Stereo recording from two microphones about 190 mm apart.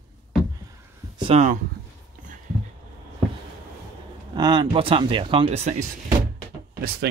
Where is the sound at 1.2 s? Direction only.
35° right (ahead or behind).